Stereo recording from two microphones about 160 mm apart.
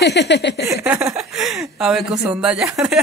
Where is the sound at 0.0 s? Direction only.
90° left.